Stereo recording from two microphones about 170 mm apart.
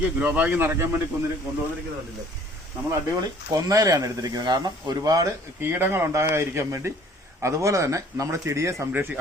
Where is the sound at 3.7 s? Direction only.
20° right (ahead or behind).